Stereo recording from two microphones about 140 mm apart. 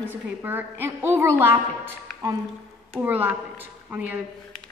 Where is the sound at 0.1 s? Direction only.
15° right (ahead or behind).